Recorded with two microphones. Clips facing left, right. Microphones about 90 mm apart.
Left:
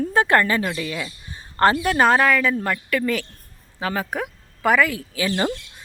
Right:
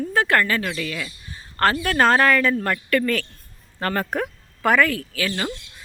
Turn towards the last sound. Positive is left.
turn(degrees=25)  # may be behind; listen again after turning